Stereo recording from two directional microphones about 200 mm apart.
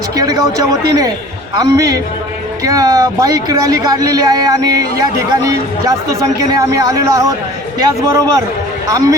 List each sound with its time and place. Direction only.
1.5 s speech: 15° right (ahead or behind)